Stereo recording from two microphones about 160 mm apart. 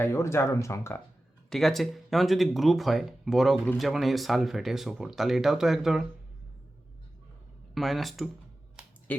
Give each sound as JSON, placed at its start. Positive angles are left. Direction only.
{"t": 0.0, "sound": "speech", "side_deg": 15}
{"t": 1.5, "sound": "speech", "side_deg": 0}
{"t": 7.7, "sound": "speech", "side_deg": 0}
{"t": 9.1, "sound": "a sound", "side_deg": 10}